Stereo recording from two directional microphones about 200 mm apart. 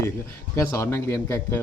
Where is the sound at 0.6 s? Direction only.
15° left (ahead or behind).